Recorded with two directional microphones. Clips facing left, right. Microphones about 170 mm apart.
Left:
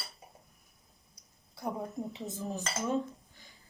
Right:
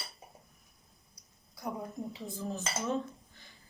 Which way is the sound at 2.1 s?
15° left (ahead or behind).